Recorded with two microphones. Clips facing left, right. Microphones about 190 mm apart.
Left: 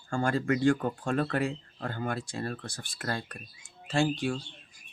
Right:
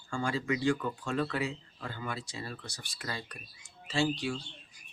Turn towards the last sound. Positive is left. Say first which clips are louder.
# left 3 dB
turn(degrees=50)  # may be behind; listen again after turning